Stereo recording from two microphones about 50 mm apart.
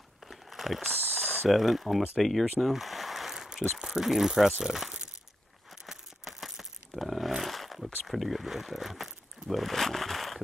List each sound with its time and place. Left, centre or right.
0.3 s a sound: centre
1.1 s mechanisms: left
1.5 s speech: centre
4.7 s crumpling: centre
5.9 s a sound: centre
8.0 s speech: centre